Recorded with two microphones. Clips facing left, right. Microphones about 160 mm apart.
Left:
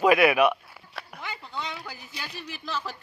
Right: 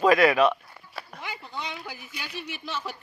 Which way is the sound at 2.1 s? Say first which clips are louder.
Right 2 dB; 35° left (ahead or behind).